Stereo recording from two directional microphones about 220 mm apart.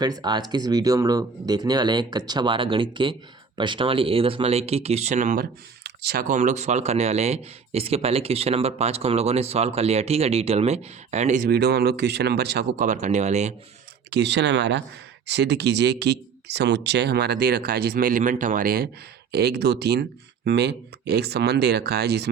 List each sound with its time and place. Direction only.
0.0 s speech: 20° right (ahead or behind); by 12.9 s 50° right (ahead or behind)
12.9 s speech: 30° right (ahead or behind)
14.1 s speech: 50° right (ahead or behind)